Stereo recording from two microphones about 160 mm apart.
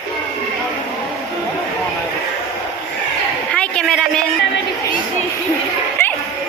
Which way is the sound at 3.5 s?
5° left (ahead or behind).